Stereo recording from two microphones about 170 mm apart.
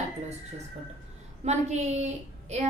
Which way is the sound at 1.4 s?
40° right (ahead or behind).